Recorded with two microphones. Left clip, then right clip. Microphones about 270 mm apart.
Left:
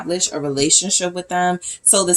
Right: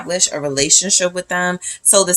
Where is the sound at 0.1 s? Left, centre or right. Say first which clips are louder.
Right 3 dB; right.